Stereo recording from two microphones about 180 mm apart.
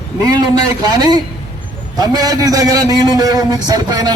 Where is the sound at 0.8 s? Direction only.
20° right (ahead or behind).